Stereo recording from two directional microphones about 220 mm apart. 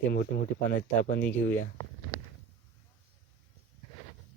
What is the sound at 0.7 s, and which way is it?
Speech, 40° left (ahead or behind).